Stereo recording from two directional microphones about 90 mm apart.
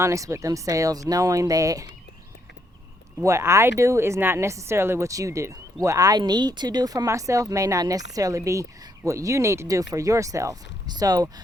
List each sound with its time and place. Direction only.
0.0 s speech: 35° right (ahead or behind)
3.2 s speech: 35° right (ahead or behind)
10.8 s speech: 50° right (ahead or behind)